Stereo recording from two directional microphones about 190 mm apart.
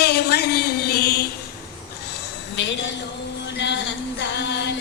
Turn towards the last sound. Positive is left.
turn(degrees=65)  # may be behind; listen again after turning